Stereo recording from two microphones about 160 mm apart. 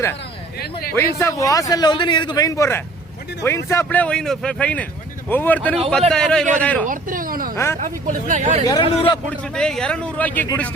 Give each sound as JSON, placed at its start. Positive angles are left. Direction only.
{"t": 0.6, "sound": "a man's voice", "side_deg": 70}
{"t": 0.9, "sound": "a man's voice", "side_deg": 20}
{"t": 6.8, "sound": "speech", "side_deg": -60}
{"t": 7.5, "sound": "speech", "side_deg": 15}
{"t": 7.8, "sound": "speech", "side_deg": -50}
{"t": 8.6, "sound": "a man's voice", "side_deg": 25}
{"t": 9.3, "sound": "speech", "side_deg": 5}